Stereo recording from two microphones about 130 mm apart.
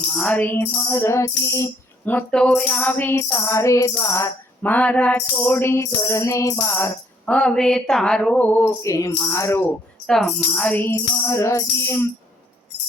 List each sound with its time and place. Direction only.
0.1 s music: 10° left (ahead or behind); by 1.7 s 25° left (ahead or behind)
2.0 s music: 10° left (ahead or behind)
4.6 s music: 10° left (ahead or behind)
10.5 s music: 10° left (ahead or behind)
10.9 s music: 25° left (ahead or behind)